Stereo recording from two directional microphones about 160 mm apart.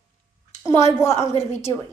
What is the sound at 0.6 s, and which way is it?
A woman's voice, 15° left (ahead or behind).